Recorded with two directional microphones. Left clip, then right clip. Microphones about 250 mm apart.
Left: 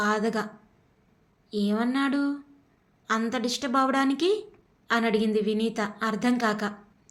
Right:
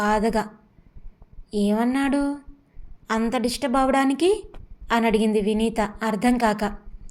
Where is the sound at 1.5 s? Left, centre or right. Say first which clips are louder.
Right 5 dB; centre.